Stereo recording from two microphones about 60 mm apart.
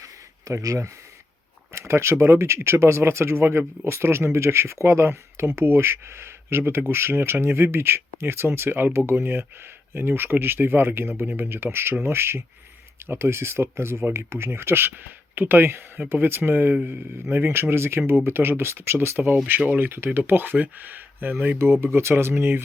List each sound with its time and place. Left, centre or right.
0.0 s a sound: right
1.7 s speech: right
21.6 s speech: right